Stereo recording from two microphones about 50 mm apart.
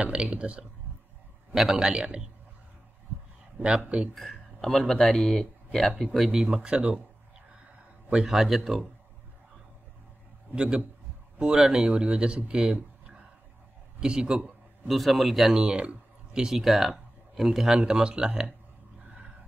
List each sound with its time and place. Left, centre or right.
0.0 s speech: right
1.5 s speech: centre
3.5 s speech: right
4.1 s a man's voice: centre
6.4 s speech: centre
8.1 s a man's voice: centre
10.5 s a man's voice: right
14.9 s a man's voice: centre
15.6 s a sound: right
16.4 s speech: centre
17.7 s speech: centre